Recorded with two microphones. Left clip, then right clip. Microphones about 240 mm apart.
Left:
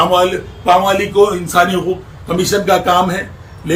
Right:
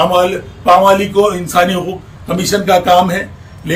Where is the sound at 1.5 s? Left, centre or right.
Centre.